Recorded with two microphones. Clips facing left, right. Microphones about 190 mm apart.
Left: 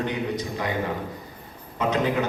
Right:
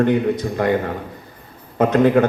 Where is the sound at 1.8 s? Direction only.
55° right (ahead or behind).